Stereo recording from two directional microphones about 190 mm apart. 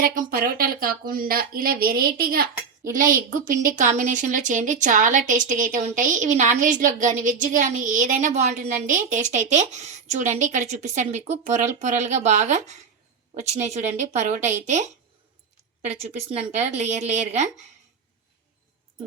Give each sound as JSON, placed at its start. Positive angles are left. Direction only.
{"t": 0.0, "sound": "a woman's voice", "side_deg": -45}
{"t": 15.9, "sound": "a woman's voice", "side_deg": -35}